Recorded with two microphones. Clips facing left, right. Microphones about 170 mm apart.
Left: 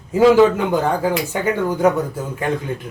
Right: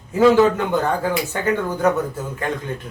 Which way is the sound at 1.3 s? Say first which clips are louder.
Left 2 dB; 15° left (ahead or behind).